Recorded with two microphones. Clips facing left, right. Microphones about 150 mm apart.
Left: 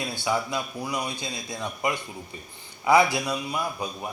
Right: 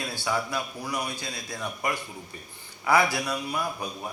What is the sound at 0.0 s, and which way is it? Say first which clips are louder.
A man's voice: left 2 dB; 15° left (ahead or behind).